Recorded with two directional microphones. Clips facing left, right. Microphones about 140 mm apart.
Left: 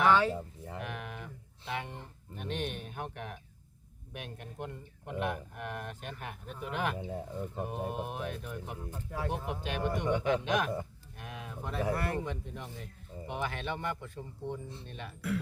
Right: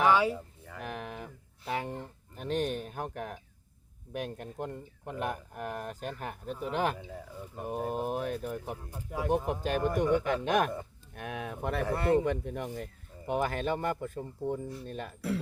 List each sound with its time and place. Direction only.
0.1 s music: 10° right (ahead or behind)
0.8 s a sound: 40° right (ahead or behind)
4.1 s speech: 40° right (ahead or behind)
7.0 s speech: 25° left (ahead or behind)
7.8 s speech: 35° right (ahead or behind)
8.9 s speech: 10° right (ahead or behind)
9.5 s speech: 40° right (ahead or behind)
11.1 s speech: 60° right (ahead or behind)
11.9 s speech: 25° right (ahead or behind)
12.2 s speech: 60° right (ahead or behind); by 15.4 s 35° right (ahead or behind)